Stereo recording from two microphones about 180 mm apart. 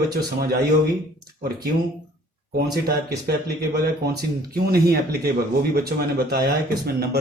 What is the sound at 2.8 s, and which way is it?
Speech, 60° right (ahead or behind).